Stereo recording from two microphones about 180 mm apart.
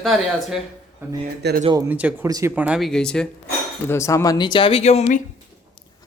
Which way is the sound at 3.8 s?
15° left (ahead or behind).